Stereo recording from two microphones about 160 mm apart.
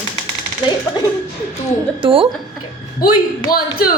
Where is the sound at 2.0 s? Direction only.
35° right (ahead or behind).